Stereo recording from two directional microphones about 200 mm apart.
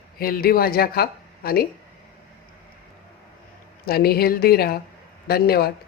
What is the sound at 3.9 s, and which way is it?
Speech, 50° left (ahead or behind).